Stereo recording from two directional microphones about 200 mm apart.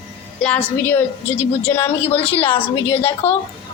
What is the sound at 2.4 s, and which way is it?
Speech, 30° left (ahead or behind).